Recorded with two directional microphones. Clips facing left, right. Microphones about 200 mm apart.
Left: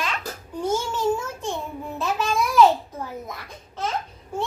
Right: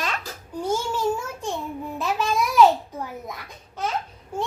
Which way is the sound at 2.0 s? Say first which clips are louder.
Even; 15° right (ahead or behind).